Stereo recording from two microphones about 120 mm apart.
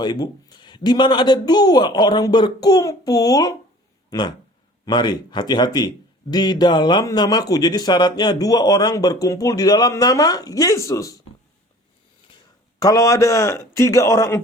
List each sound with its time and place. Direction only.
0.0 s a man's voice: 35° left (ahead or behind)
12.8 s a man's voice: 30° left (ahead or behind)